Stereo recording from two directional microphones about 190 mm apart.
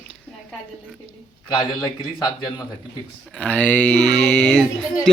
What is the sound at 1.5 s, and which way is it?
A man's voice, 20° left (ahead or behind).